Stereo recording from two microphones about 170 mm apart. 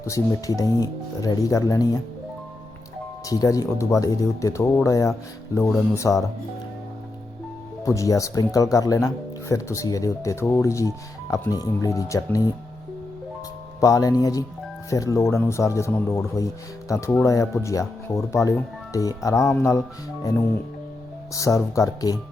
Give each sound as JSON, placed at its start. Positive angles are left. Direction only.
{"t": 0.0, "sound": "speech", "side_deg": 20}
{"t": 3.2, "sound": "speech", "side_deg": 20}
{"t": 7.9, "sound": "speech", "side_deg": 20}
{"t": 13.7, "sound": "speech", "side_deg": 20}
{"t": 21.3, "sound": "speech", "side_deg": 20}